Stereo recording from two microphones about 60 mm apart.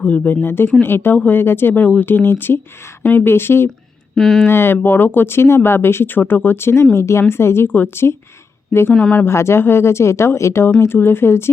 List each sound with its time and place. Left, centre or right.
0.0 s speech: left
0.4 s speech: left
4.1 s speech: centre
4.4 s speech: left
7.7 s speech: left
9.2 s speech: left
10.8 s speech: left